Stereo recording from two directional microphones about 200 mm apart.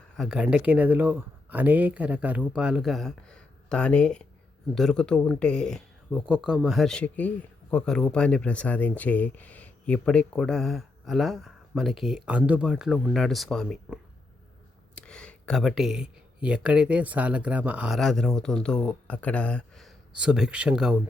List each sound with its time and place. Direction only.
0.2 s speech: 5° right (ahead or behind)